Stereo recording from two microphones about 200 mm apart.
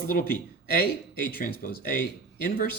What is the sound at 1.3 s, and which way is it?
Speech, 45° left (ahead or behind).